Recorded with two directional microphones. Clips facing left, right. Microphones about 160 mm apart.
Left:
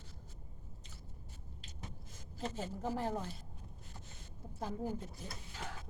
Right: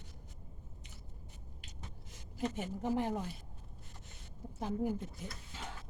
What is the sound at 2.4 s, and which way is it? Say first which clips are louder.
Speech: right 3 dB; 15° right (ahead or behind).